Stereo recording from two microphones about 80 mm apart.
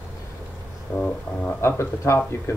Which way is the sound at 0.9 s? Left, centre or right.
Centre.